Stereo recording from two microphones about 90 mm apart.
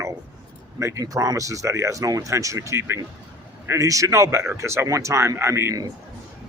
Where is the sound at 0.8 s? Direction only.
35° right (ahead or behind).